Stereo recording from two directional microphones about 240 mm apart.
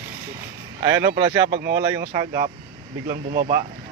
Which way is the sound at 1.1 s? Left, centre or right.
Right.